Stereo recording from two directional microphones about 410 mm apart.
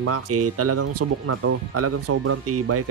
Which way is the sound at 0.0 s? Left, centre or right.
Right.